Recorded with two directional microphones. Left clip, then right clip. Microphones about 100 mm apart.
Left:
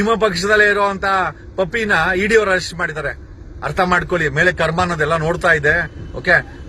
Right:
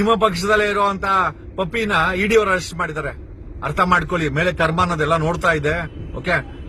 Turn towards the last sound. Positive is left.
turn(degrees=-30)  # may be behind; listen again after turning